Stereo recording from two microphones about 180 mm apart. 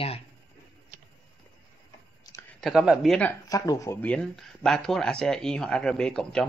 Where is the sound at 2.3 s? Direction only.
20° left (ahead or behind).